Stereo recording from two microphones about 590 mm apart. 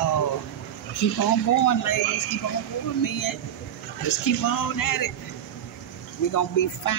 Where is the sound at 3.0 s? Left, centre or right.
Left.